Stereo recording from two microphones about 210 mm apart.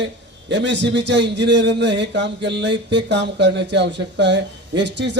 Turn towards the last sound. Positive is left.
turn(degrees=-55)  # may be behind; listen again after turning